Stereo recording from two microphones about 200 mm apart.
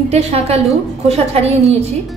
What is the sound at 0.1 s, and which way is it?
A woman's voice, 30° right (ahead or behind).